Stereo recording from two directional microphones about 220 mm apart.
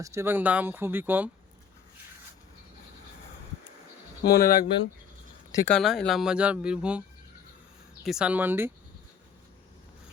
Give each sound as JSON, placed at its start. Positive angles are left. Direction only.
{"t": 0.0, "sound": "speech", "side_deg": -10}
{"t": 4.2, "sound": "speech", "side_deg": 45}
{"t": 5.7, "sound": "speech", "side_deg": 0}
{"t": 8.0, "sound": "speech", "side_deg": -5}